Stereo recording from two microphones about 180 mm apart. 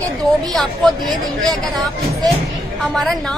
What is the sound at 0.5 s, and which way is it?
A woman's voice, centre (ahead or behind).